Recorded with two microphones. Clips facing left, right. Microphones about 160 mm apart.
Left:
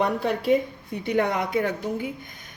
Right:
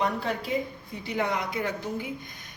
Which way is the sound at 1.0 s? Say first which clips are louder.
Left 5 dB; 60° left (ahead or behind).